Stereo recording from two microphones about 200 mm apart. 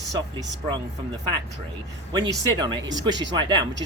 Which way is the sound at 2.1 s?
20° right (ahead or behind).